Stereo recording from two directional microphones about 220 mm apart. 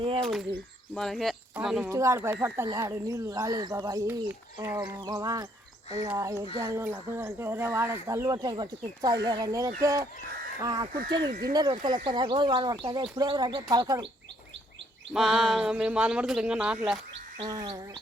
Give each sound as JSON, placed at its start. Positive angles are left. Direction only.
{"t": 0.2, "sound": "speech", "side_deg": 0}
{"t": 1.9, "sound": "speech", "side_deg": -15}
{"t": 11.2, "sound": "speech", "side_deg": -45}
{"t": 11.5, "sound": "speech", "side_deg": -20}
{"t": 15.1, "sound": "speech", "side_deg": 0}
{"t": 17.3, "sound": "speech", "side_deg": -20}